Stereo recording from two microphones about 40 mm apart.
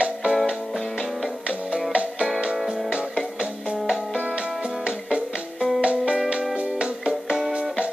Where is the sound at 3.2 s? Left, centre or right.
Centre.